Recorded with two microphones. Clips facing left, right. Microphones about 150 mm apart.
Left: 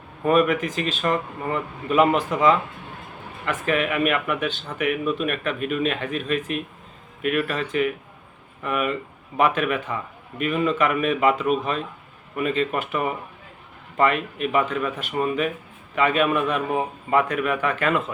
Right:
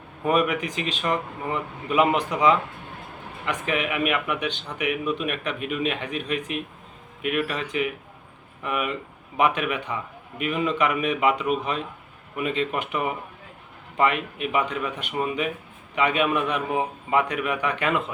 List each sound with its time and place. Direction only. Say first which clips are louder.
0.3 s speech: left 3 dB; 15° right (ahead or behind)
3.4 s speech: left 3 dB; 15° right (ahead or behind)